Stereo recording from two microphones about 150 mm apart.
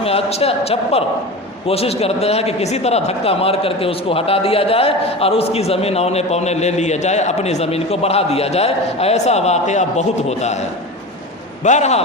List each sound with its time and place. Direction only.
0.0 s a man's voice: 45° left (ahead or behind)
11.6 s a man's voice: 50° left (ahead or behind)